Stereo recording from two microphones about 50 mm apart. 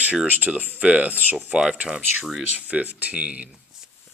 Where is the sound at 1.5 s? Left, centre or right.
Centre.